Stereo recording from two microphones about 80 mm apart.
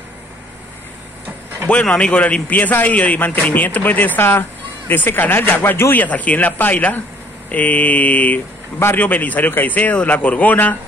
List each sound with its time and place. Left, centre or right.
1.7 s a man's voice: centre